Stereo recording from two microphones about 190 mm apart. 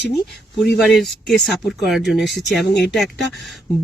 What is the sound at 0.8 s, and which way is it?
Speech, centre (ahead or behind).